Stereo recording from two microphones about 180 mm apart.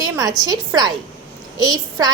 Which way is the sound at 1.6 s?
20° right (ahead or behind).